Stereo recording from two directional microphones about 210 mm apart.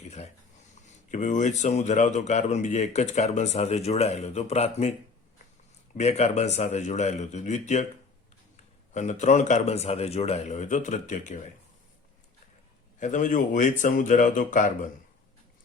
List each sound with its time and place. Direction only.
0.0 s a sound: 30° left (ahead or behind)
0.9 s speech: 35° left (ahead or behind)
6.0 s speech: 30° left (ahead or behind)
8.9 s speech: 35° left (ahead or behind)
13.0 s speech: 35° left (ahead or behind)